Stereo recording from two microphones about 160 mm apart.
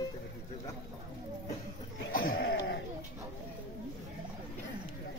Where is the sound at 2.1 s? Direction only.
70° left (ahead or behind).